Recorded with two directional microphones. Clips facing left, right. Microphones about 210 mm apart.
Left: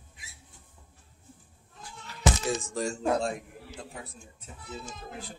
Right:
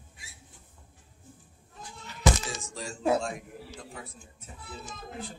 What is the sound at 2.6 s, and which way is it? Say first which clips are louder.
Speech: left 8 dB; 50° left (ahead or behind).